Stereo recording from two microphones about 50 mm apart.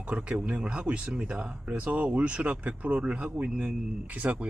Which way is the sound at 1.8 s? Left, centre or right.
Right.